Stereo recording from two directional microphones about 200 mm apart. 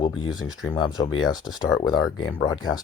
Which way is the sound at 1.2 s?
20° left (ahead or behind).